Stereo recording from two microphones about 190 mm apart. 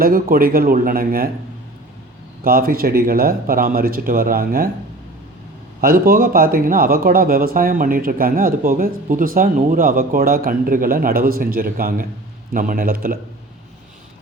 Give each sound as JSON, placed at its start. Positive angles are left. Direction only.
{"t": 0.0, "sound": "speech", "side_deg": -50}
{"t": 2.4, "sound": "speech", "side_deg": -50}
{"t": 5.8, "sound": "speech", "side_deg": -50}